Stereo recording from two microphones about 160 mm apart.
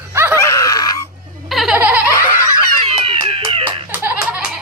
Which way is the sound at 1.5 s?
Centre (ahead or behind).